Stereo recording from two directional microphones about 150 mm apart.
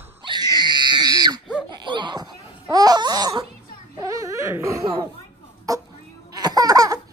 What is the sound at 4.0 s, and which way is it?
Wail, 20° right (ahead or behind).